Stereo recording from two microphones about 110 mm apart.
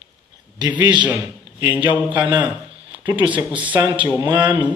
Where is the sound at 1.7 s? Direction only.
15° right (ahead or behind).